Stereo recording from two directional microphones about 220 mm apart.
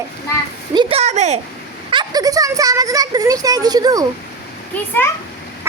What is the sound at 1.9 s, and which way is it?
Speech, 15° right (ahead or behind).